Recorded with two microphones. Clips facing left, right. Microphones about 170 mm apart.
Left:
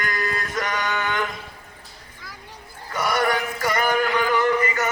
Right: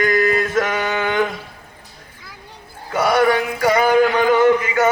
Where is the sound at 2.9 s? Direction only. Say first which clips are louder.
Right 7 dB; 90° right.